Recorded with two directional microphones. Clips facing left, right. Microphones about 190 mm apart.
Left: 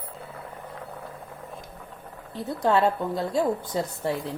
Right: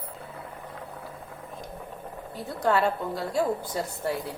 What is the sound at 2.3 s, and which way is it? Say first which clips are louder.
A woman's voice: left 2 dB; 20° left (ahead or behind).